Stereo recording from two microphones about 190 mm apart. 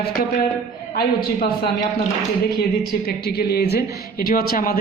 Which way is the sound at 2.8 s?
55° left (ahead or behind).